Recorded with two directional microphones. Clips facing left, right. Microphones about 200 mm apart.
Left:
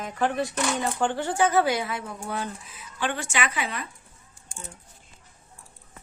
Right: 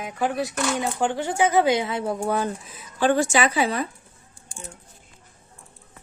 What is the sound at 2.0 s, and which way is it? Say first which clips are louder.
A woman's voice: right 8 dB; 40° right (ahead or behind).